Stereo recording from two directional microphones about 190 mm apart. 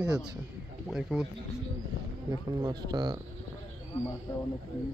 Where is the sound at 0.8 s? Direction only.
5° right (ahead or behind).